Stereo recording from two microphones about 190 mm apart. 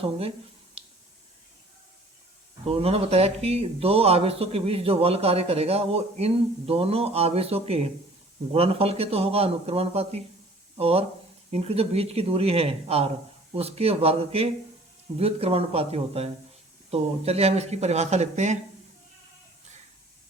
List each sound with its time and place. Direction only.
2.6 s speech: 30° right (ahead or behind)